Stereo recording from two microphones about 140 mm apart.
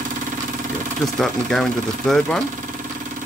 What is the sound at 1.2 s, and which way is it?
Speech, 5° left (ahead or behind).